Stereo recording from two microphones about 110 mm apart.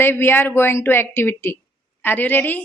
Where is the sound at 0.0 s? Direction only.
20° left (ahead or behind).